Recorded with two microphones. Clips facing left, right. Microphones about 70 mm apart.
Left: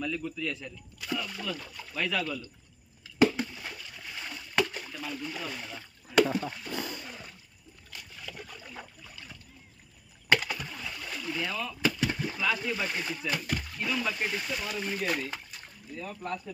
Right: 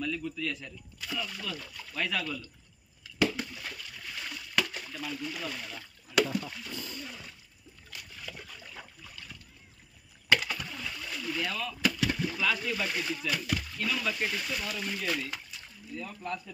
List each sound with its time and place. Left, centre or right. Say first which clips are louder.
0.0 s a man's voice: left 1 dB; centre
1.3 s speech: left 3 dB; left
2.0 s speech: left 2 dB; centre
3.2 s water: left 5 dB; left
5.4 s a man's voice: even; centre
6.1 s speech: left 3 dB; left
6.9 s a sound: left 1 dB; left
8.3 s splash: left 2 dB; centre
10.5 s a sound: even; centre
11.2 s speech: even; centre
11.8 s speech: even; left
13.7 s speech: left 1 dB; centre